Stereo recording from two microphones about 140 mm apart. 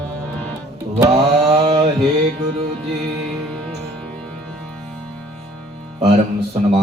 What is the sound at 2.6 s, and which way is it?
Music, 40° right (ahead or behind).